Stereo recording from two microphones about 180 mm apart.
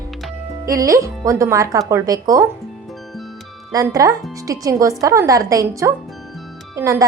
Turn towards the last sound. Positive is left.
turn(degrees=-15)  # may be behind; listen again after turning